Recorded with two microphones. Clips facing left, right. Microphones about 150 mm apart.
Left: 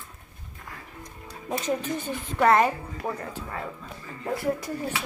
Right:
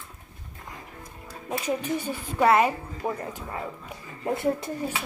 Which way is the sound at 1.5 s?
10° right (ahead or behind).